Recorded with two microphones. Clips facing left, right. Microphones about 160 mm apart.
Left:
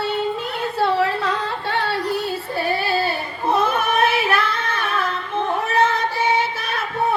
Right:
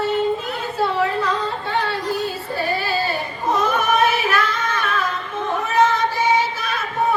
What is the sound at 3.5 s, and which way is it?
Yodeling, 60° left (ahead or behind).